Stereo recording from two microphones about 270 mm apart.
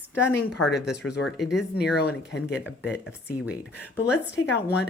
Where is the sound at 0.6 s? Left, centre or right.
Left.